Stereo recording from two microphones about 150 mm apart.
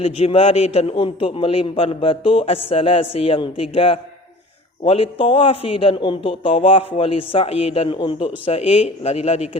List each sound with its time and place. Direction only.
0.0 s a man's voice: 40° left (ahead or behind)